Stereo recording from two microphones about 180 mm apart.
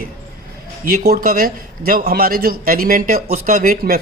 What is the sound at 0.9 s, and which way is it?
A man's voice, 55° right (ahead or behind).